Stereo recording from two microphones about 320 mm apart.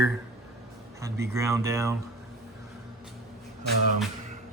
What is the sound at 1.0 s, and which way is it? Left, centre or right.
Speech, centre.